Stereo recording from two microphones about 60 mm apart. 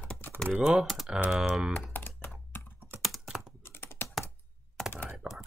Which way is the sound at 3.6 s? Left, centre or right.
Left.